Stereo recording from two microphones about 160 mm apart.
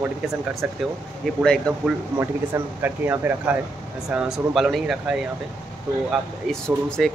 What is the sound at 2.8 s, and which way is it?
Speech, 15° right (ahead or behind).